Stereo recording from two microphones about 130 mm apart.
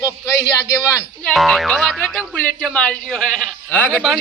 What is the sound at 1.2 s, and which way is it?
A man's voice, centre (ahead or behind).